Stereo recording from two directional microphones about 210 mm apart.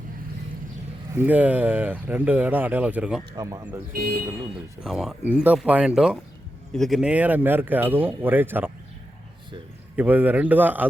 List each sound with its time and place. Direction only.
1.1 s speech: 10° right (ahead or behind)
3.3 s speech: 15° right (ahead or behind)
3.9 s speech: 45° right (ahead or behind)
4.8 s speech: centre (ahead or behind)
9.9 s speech: 10° right (ahead or behind)